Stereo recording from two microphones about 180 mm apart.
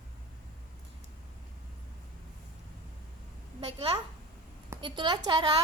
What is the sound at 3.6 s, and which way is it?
A woman's voice, 30° right (ahead or behind).